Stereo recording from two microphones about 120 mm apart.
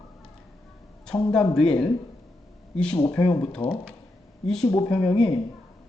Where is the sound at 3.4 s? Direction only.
5° left (ahead or behind).